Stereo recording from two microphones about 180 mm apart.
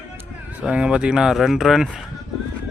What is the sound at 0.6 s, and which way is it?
Speech, 5° right (ahead or behind).